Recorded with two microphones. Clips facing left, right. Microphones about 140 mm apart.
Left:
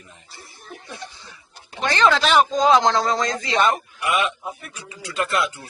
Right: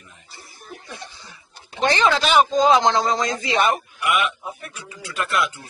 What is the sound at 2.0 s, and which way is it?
A man's voice, 5° right (ahead or behind).